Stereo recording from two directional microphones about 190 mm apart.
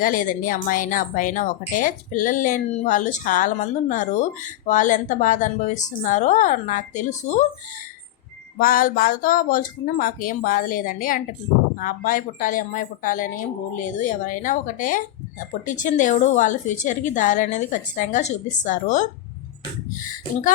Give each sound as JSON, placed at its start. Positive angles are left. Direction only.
{"t": 0.0, "sound": "a woman's voice", "side_deg": 45}
{"t": 8.5, "sound": "a woman's voice", "side_deg": 50}